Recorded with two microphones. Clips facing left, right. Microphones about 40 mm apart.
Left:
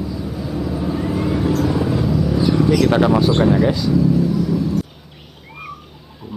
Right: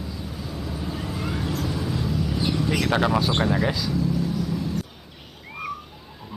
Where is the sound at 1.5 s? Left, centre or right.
Left.